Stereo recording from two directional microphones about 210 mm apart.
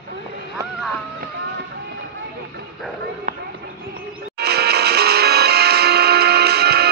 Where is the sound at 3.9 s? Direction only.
50° right (ahead or behind).